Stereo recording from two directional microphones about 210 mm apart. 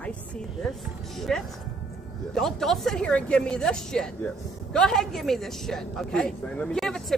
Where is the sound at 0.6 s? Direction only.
Centre (ahead or behind).